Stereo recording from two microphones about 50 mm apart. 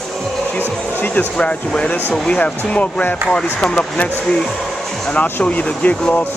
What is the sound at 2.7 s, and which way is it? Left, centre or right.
Speech, left.